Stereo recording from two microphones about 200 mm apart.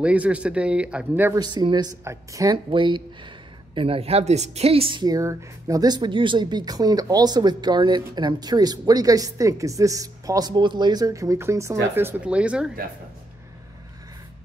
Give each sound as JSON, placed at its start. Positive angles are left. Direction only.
{"t": 0.0, "sound": "a woman's voice", "side_deg": -5}